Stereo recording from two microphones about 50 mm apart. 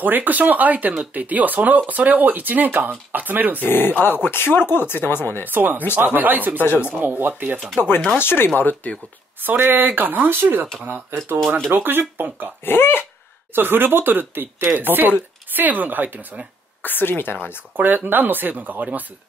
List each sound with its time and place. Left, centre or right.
0.0 s speech: right
3.6 s speech: left
5.4 s speech: right
7.8 s speech: left
8.5 s speech: left
9.4 s speech: right
11.7 s speech: right
12.6 s speech: left
13.6 s speech: right
16.8 s speech: left
17.7 s speech: right